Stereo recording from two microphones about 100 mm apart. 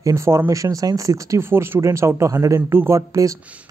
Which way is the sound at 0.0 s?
30° right (ahead or behind).